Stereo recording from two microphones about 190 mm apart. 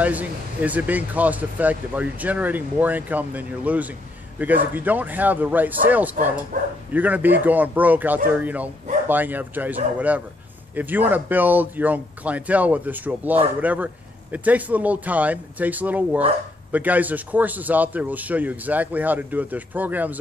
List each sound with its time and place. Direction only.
0.0 s speech: 10° right (ahead or behind)
6.5 s speech: 45° right (ahead or behind)
6.9 s speech: 10° right (ahead or behind)